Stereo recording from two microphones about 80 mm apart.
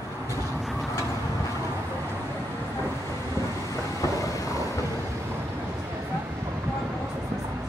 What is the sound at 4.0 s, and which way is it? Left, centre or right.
Vehicle, left.